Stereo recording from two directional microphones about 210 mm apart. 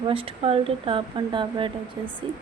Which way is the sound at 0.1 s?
25° right (ahead or behind).